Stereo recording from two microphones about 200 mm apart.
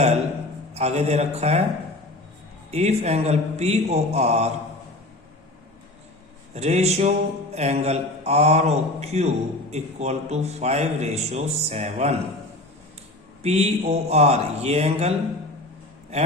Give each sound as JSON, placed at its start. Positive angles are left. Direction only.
{"t": 0.7, "sound": "a man's voice", "side_deg": -30}
{"t": 2.7, "sound": "a man's voice", "side_deg": -35}
{"t": 6.5, "sound": "a man's voice", "side_deg": -30}
{"t": 13.4, "sound": "a man's voice", "side_deg": -30}
{"t": 16.1, "sound": "a man's voice", "side_deg": -30}